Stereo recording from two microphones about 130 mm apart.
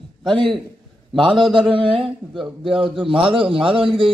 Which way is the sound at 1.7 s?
40° right (ahead or behind).